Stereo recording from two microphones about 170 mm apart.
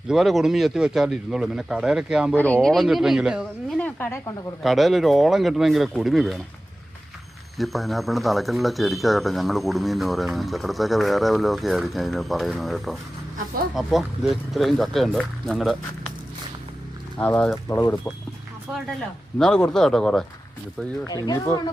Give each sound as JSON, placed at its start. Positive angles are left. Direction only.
{"t": 0.1, "sound": "speech", "side_deg": 0}
{"t": 2.3, "sound": "speech", "side_deg": 10}
{"t": 3.8, "sound": "a woman's voice", "side_deg": 10}
{"t": 4.6, "sound": "speech", "side_deg": 0}
{"t": 7.6, "sound": "speech", "side_deg": 0}
{"t": 17.2, "sound": "speech", "side_deg": 10}
{"t": 19.4, "sound": "speech", "side_deg": 5}
{"t": 21.1, "sound": "speech", "side_deg": 20}